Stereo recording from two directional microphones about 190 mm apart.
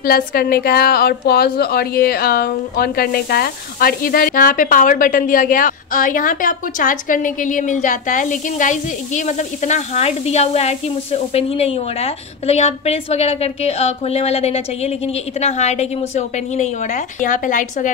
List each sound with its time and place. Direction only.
0.0 s a woman's voice: 50° left (ahead or behind)